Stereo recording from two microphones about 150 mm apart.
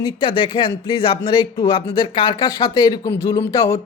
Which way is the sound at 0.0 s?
30° left (ahead or behind).